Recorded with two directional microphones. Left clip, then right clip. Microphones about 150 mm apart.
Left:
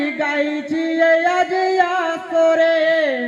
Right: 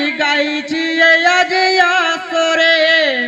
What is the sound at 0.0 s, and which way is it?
Music, 35° left (ahead or behind).